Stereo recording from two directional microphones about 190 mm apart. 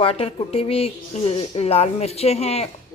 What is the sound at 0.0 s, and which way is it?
A woman's voice, 30° left (ahead or behind).